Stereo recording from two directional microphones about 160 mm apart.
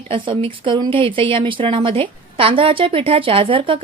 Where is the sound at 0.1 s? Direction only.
35° right (ahead or behind).